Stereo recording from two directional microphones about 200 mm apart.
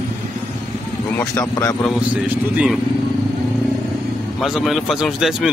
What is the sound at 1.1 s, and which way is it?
Speech, 15° left (ahead or behind).